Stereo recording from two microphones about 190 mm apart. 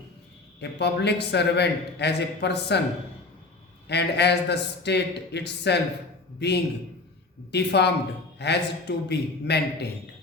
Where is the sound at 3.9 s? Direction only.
60° left (ahead or behind).